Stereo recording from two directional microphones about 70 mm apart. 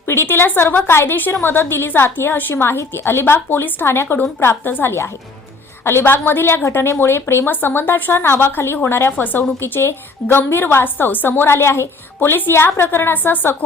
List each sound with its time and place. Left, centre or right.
0.1 s a woman's voice: left